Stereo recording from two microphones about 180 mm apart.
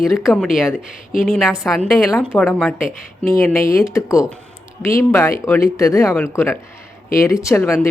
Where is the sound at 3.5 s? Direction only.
15° left (ahead or behind).